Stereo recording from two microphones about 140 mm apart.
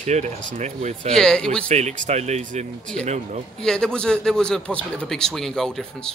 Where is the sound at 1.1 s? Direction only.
5° left (ahead or behind).